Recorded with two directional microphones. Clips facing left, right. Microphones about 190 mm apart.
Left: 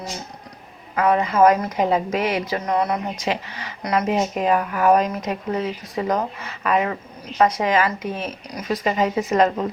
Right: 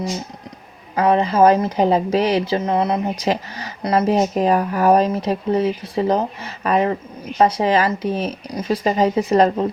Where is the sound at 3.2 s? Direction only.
40° right (ahead or behind).